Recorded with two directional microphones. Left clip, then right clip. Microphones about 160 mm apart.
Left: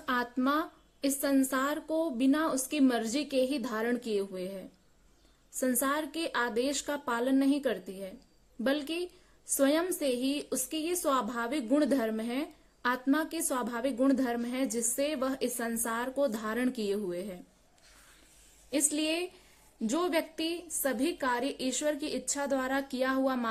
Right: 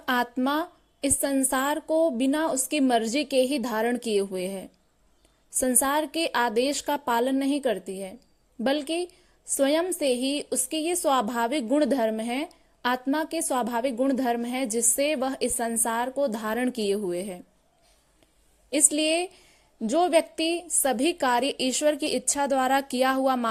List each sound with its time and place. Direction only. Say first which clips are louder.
0.0 s a sound: right 6 dB; 40° right (ahead or behind)
0.3 s a woman's voice: right 3 dB; 35° right (ahead or behind)
18.7 s a woman's voice: right 7 dB; 35° right (ahead or behind)